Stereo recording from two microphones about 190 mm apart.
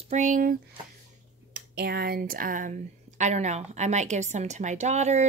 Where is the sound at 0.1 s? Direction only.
40° right (ahead or behind).